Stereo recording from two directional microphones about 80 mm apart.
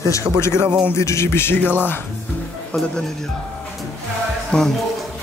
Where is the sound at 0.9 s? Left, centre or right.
Left.